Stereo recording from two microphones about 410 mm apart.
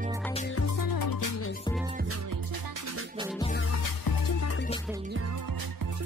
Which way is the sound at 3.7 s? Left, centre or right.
Left.